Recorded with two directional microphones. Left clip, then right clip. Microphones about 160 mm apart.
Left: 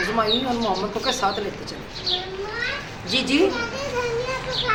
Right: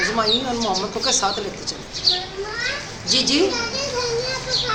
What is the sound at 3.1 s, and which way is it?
Speech, centre (ahead or behind).